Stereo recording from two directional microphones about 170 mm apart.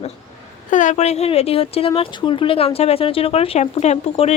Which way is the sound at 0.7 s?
50° left (ahead or behind).